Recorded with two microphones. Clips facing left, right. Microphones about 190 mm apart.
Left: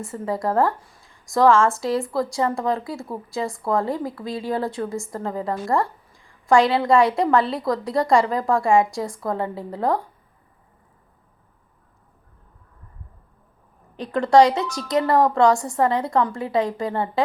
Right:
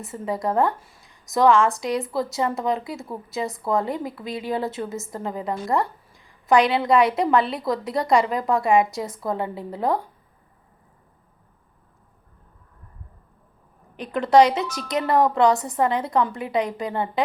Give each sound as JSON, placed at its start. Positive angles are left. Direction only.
{"t": 0.0, "sound": "a woman's voice", "side_deg": -20}
{"t": 13.9, "sound": "a woman's voice", "side_deg": -20}